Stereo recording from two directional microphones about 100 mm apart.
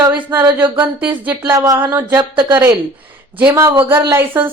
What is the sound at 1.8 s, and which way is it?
Speech, 20° right (ahead or behind).